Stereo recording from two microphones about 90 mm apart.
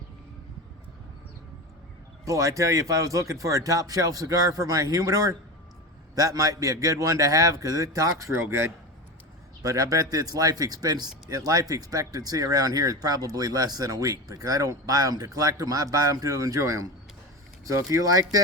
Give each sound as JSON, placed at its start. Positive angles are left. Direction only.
{"t": 2.2, "sound": "speech", "side_deg": -35}
{"t": 9.6, "sound": "speech", "side_deg": -40}